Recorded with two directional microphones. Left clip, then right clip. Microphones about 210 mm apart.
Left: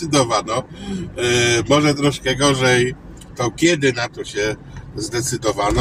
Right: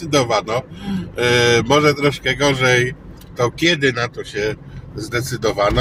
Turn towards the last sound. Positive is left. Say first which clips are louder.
# right 2 dB
turn(degrees=-15)  # may be behind; listen again after turning